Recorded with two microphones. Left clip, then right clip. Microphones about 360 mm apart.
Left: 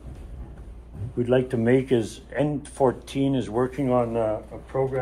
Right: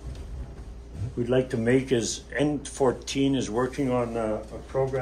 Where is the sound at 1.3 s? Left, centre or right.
Centre.